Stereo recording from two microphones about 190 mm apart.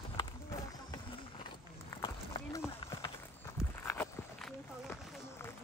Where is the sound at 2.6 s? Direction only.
15° left (ahead or behind).